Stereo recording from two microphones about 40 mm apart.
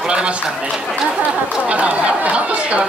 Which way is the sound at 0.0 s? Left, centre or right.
Right.